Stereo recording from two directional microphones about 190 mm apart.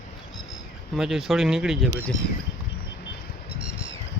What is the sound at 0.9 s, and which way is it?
Speech, centre (ahead or behind).